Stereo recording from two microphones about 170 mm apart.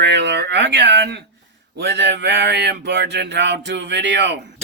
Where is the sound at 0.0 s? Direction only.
90° right.